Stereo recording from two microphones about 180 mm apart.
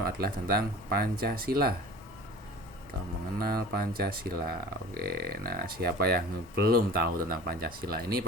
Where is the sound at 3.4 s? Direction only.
55° right (ahead or behind).